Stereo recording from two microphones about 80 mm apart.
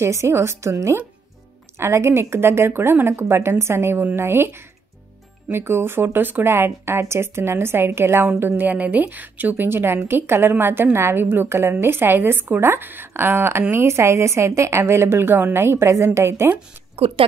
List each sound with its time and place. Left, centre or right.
0.0 s a woman's voice: right